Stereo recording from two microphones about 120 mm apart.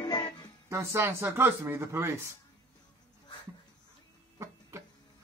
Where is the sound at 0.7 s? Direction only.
20° right (ahead or behind).